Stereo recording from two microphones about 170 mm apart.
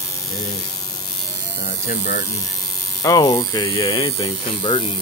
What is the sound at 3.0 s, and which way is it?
Speech, 20° left (ahead or behind).